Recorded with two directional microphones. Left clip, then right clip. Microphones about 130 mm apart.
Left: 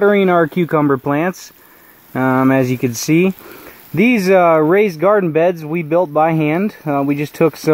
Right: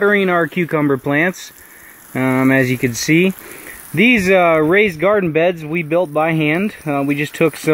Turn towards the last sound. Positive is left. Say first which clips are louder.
# left 1 dB
turn(degrees=0)  # may be behind; listen again after turning